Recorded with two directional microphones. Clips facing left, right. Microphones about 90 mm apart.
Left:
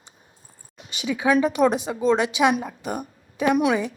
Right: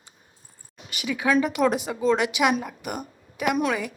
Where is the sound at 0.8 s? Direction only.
20° left (ahead or behind).